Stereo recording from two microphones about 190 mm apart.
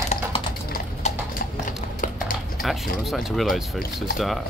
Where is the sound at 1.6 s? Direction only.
45° left (ahead or behind).